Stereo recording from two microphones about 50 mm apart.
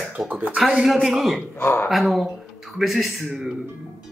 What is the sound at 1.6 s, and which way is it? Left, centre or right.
Music, left.